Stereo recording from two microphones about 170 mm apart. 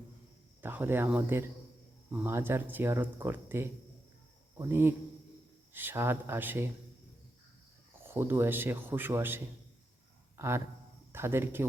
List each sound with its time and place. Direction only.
0.6 s speech: 10° right (ahead or behind)
8.0 s speech: 15° right (ahead or behind)
10.3 s a sound: 15° right (ahead or behind)
11.1 s speech: 15° right (ahead or behind)